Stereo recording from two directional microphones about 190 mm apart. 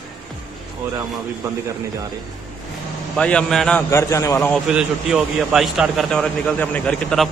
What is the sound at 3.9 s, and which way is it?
Speech, 15° left (ahead or behind).